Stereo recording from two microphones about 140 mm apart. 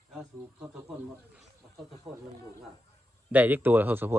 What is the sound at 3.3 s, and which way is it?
Speech, 15° right (ahead or behind).